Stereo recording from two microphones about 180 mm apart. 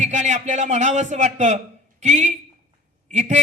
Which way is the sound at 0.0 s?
40° right (ahead or behind).